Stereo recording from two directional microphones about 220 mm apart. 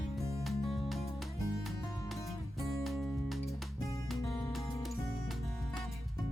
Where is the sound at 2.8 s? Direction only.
Centre (ahead or behind).